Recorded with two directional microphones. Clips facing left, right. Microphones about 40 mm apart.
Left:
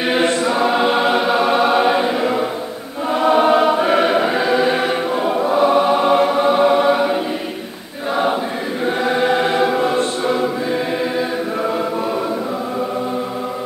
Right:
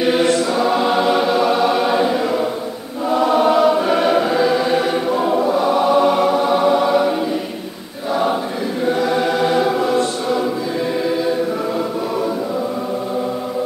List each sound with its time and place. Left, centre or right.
0.0 s choir: left
8.9 s choir: left